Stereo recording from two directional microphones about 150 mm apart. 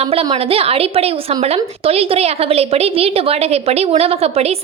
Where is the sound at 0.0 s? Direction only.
40° right (ahead or behind).